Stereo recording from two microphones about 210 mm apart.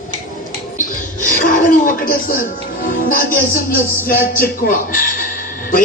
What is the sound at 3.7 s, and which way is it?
A man's voice, 45° left (ahead or behind).